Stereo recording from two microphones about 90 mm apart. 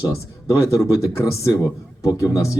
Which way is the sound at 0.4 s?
40° left (ahead or behind).